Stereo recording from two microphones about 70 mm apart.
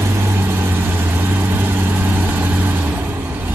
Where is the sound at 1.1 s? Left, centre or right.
Right.